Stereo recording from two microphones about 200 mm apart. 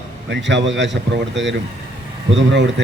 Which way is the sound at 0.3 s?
65° right (ahead or behind).